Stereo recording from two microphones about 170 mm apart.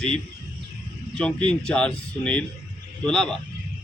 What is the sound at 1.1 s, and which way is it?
A man's voice, 5° left (ahead or behind).